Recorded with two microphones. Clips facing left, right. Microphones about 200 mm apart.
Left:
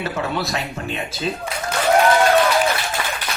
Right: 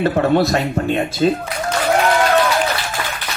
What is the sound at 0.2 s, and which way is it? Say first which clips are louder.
Speech: right 9 dB; 40° right (ahead or behind).